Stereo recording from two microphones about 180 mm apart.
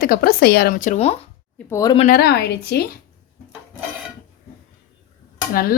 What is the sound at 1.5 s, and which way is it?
Speech, 15° left (ahead or behind).